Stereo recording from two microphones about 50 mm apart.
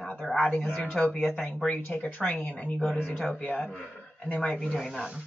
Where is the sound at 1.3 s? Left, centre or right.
Centre.